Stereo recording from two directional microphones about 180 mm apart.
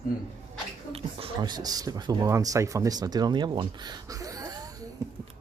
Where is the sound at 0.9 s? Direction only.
25° right (ahead or behind).